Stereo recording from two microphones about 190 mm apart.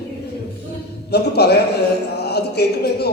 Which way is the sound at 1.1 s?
60° left (ahead or behind).